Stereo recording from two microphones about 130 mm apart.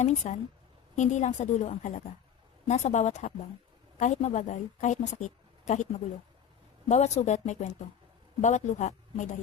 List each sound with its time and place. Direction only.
0.0 s a woman's voice: 65° left (ahead or behind)